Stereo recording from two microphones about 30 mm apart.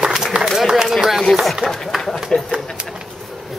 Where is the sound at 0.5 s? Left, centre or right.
Centre.